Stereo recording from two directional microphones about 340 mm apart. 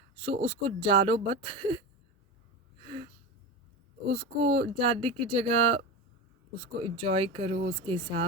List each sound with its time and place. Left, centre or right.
0.2 s speech: centre
4.1 s speech: centre
6.9 s speech: centre